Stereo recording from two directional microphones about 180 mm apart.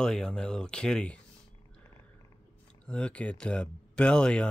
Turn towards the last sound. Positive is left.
turn(degrees=5)  # may be behind; listen again after turning